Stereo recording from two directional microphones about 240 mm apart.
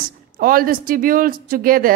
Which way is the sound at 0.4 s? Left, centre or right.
Right.